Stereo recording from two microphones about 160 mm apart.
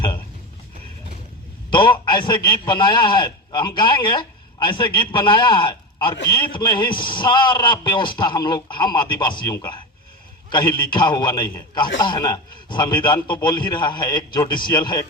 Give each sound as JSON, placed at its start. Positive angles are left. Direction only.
{"t": 1.7, "sound": "a man's voice", "side_deg": 30}